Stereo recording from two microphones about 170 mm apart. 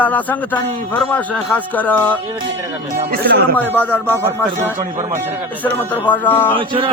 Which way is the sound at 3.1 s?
70° right (ahead or behind).